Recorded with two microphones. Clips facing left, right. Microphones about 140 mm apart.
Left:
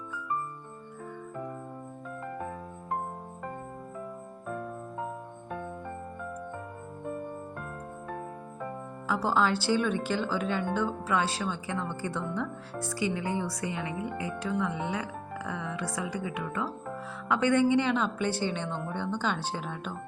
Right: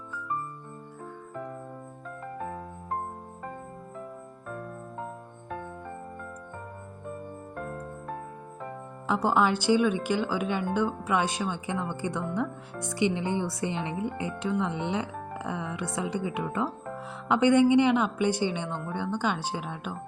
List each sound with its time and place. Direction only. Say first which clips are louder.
9.0 s a woman's voice: right 2 dB; 20° right (ahead or behind)